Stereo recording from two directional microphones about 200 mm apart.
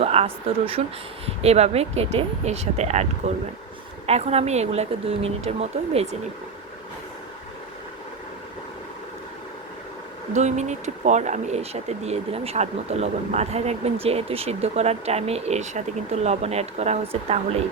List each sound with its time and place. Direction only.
0.0 s speech: 30° right (ahead or behind)
10.3 s speech: 35° right (ahead or behind)